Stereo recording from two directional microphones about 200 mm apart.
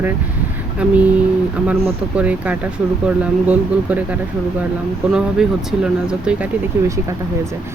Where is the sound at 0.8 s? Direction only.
5° right (ahead or behind).